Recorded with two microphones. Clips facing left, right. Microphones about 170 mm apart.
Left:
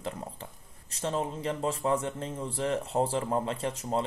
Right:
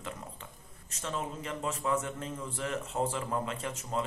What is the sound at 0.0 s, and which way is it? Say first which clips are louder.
Speech: left 5 dB; 35° left (ahead or behind).